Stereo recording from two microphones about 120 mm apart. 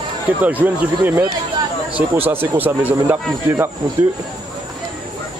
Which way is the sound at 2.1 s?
55° right (ahead or behind).